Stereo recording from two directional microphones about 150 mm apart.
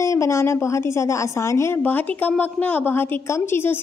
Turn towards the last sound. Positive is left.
turn(degrees=15)  # may be behind; listen again after turning